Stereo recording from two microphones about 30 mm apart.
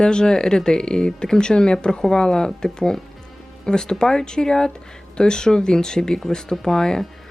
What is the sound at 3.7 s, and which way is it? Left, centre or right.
Speech, left.